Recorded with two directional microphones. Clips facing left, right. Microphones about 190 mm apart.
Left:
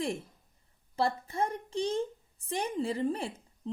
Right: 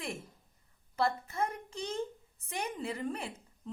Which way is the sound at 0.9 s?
30° left (ahead or behind).